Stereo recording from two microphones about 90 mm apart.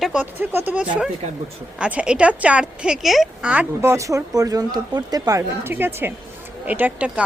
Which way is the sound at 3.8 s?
35° right (ahead or behind).